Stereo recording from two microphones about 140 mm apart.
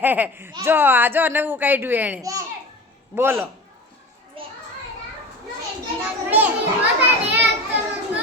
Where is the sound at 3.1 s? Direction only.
15° right (ahead or behind).